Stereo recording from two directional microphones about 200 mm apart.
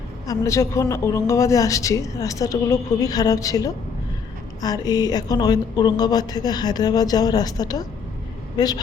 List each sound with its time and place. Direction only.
0.3 s speech: 15° left (ahead or behind)